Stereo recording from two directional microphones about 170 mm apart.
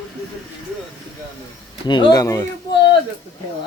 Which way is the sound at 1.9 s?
25° left (ahead or behind).